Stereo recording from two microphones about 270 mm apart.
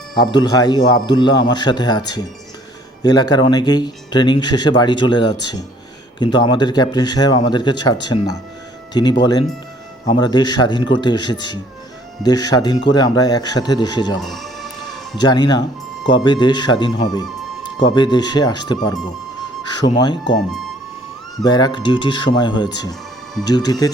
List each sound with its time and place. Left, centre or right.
0.1 s speech: centre
14.2 s music: centre
15.2 s speech: centre
21.3 s speech: centre